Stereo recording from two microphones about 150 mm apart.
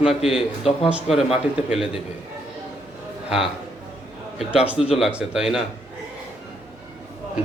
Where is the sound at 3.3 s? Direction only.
5° right (ahead or behind).